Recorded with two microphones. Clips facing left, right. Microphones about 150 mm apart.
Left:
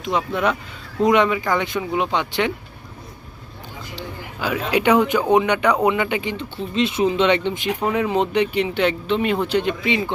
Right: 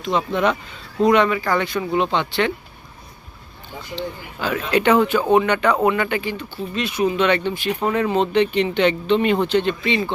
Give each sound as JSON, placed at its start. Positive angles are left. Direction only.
{"t": 0.0, "sound": "speech", "side_deg": 10}
{"t": 1.0, "sound": "speech", "side_deg": 15}
{"t": 3.9, "sound": "speech", "side_deg": 10}